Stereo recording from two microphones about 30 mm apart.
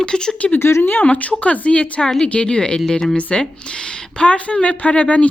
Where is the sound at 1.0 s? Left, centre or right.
Left.